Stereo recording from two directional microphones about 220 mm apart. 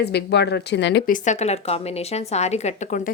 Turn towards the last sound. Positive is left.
turn(degrees=35)  # may be behind; listen again after turning